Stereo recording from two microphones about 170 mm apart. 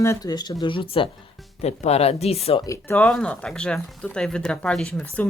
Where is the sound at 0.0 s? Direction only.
20° left (ahead or behind); by 2.6 s 35° left (ahead or behind).